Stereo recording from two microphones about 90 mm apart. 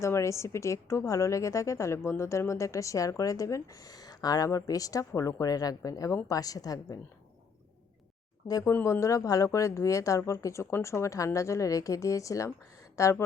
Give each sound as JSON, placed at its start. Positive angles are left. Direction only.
{"t": 0.0, "sound": "a woman's voice", "side_deg": 30}
{"t": 8.4, "sound": "a woman's voice", "side_deg": 45}
{"t": 8.7, "sound": "a woman's voice", "side_deg": 35}
{"t": 12.8, "sound": "a sound", "side_deg": 35}